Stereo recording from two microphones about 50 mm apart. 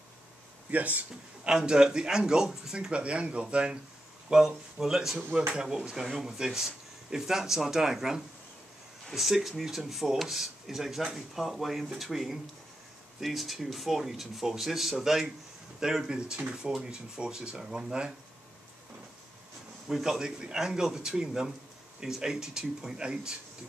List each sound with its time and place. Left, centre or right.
0.7 s a man's voice: right
1.5 s speech: centre
4.3 s speech: centre
19.9 s speech: centre